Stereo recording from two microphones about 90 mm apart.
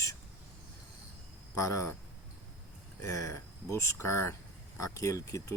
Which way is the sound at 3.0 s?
35° left (ahead or behind).